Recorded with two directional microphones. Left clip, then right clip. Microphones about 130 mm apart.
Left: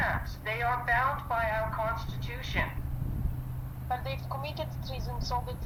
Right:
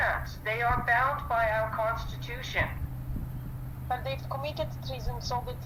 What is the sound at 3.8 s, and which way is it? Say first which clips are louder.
Speech: right 2 dB; 45° right (ahead or behind).